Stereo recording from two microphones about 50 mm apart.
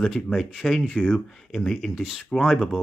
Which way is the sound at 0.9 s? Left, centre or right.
Centre.